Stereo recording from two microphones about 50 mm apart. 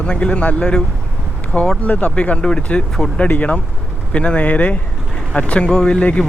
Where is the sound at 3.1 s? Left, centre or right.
Left.